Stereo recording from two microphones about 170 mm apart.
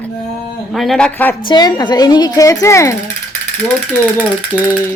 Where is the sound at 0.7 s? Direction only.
Centre (ahead or behind).